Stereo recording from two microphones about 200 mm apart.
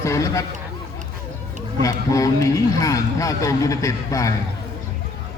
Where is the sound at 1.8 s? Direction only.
15° left (ahead or behind).